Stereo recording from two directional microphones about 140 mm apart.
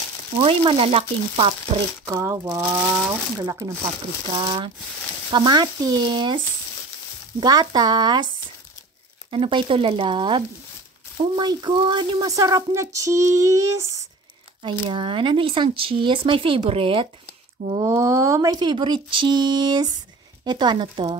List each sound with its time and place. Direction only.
0.4 s speech: 40° right (ahead or behind)
2.1 s speech: 20° right (ahead or behind)
4.4 s speech: 35° right (ahead or behind)
9.3 s speech: 35° right (ahead or behind); by 14.0 s 20° right (ahead or behind)
14.6 s speech: 35° right (ahead or behind)
17.8 s speech: 20° right (ahead or behind); by 21.2 s 35° right (ahead or behind)